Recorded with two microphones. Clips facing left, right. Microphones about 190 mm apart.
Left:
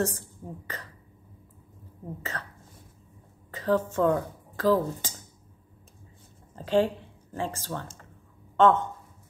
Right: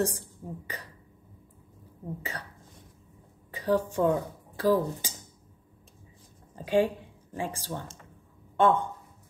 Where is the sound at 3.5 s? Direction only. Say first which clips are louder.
Left 1 dB; 15° right (ahead or behind).